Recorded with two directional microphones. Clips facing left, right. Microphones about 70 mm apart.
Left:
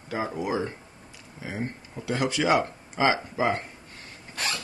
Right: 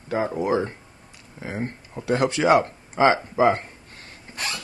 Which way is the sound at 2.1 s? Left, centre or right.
Right.